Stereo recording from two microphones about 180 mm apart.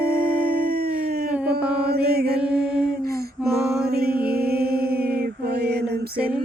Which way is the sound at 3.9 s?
60° right (ahead or behind).